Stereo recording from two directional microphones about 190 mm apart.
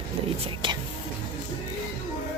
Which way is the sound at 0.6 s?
25° right (ahead or behind).